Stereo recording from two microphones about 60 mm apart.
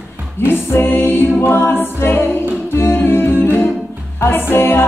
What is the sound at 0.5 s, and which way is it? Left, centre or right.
Music, left.